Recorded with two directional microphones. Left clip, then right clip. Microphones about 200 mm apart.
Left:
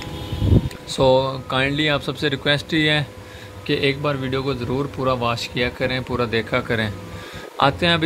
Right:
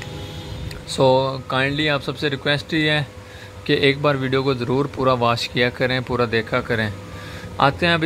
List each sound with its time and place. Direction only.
0.9 s speech: 10° right (ahead or behind)
3.6 s a man's voice: 15° right (ahead or behind)